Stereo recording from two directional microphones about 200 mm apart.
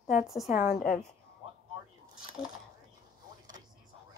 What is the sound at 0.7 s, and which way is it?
Speech, 40° left (ahead or behind).